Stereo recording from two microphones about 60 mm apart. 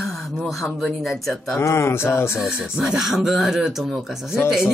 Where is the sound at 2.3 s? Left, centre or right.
Centre.